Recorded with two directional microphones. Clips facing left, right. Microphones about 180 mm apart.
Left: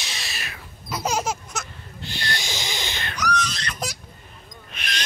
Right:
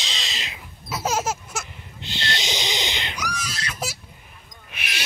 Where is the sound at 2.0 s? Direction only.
20° right (ahead or behind); by 3.9 s 5° right (ahead or behind).